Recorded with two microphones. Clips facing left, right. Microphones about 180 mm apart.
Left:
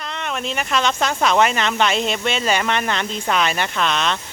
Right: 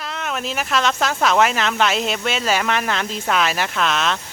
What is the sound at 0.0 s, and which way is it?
Speech, centre (ahead or behind).